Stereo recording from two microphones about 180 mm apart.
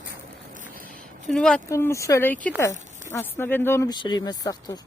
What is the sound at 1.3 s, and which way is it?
Speech, 5° left (ahead or behind).